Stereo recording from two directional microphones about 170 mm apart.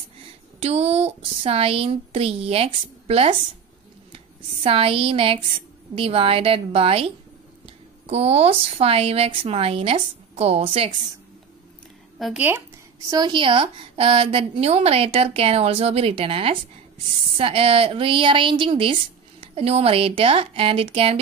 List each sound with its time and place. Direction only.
0.6 s a woman's voice: 35° right (ahead or behind)
4.6 s a woman's voice: 35° right (ahead or behind)
12.2 s speech: centre (ahead or behind)
13.1 s a woman's voice: 25° right (ahead or behind)